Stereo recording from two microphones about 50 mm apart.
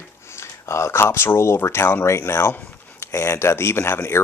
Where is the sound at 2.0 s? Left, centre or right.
Left.